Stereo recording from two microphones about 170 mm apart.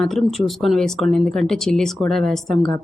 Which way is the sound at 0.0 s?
Centre (ahead or behind).